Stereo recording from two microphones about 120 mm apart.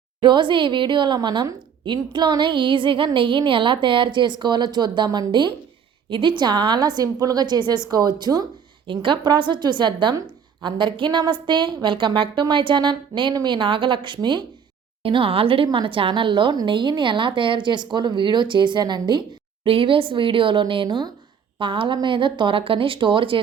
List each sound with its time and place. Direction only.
0.2 s a woman's voice: 40° right (ahead or behind)
8.9 s a woman's voice: 45° right (ahead or behind)
19.6 s a woman's voice: 50° right (ahead or behind)